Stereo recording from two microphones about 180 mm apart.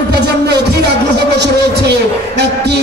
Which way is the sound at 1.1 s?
70° right (ahead or behind).